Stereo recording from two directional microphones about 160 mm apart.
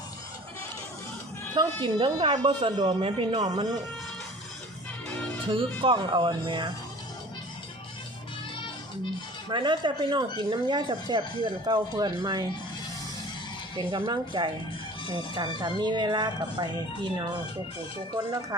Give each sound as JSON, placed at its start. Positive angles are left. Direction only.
{"t": 1.5, "sound": "speech", "side_deg": -30}
{"t": 5.5, "sound": "speech", "side_deg": -30}
{"t": 9.5, "sound": "speech", "side_deg": -30}
{"t": 13.7, "sound": "speech", "side_deg": -30}